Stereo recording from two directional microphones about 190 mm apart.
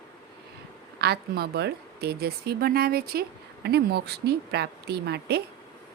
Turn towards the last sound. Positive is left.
turn(degrees=-60)  # may be behind; listen again after turning